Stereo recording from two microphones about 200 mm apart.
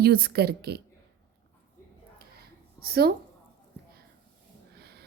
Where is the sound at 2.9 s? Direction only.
50° right (ahead or behind).